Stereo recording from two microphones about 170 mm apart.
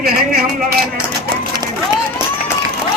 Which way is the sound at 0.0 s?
65° right (ahead or behind).